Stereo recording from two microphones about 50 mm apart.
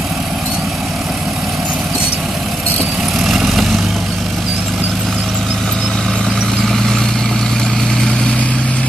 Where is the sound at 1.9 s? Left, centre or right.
Right.